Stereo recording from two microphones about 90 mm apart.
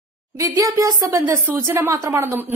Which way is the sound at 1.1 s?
25° right (ahead or behind).